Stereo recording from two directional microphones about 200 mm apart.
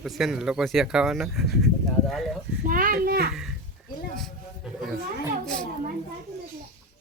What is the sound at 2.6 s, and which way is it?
Speech, 45° right (ahead or behind).